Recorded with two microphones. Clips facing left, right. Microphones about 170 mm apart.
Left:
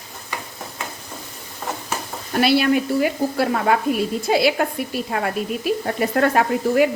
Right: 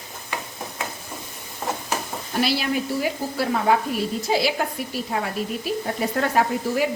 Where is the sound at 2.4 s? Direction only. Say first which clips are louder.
Left 6 dB; 60° left (ahead or behind).